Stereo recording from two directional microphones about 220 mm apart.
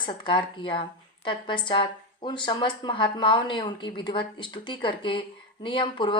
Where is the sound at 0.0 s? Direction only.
20° left (ahead or behind).